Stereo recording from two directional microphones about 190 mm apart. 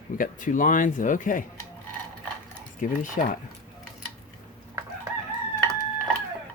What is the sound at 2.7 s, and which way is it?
Speech, 45° left (ahead or behind).